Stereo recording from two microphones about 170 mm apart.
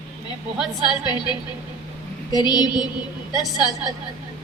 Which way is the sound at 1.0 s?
25° left (ahead or behind).